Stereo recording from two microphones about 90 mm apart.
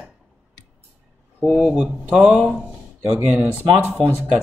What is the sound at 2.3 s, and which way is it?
Speech, 20° right (ahead or behind).